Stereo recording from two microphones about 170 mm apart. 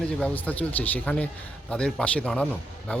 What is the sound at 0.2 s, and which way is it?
Speech, 10° left (ahead or behind).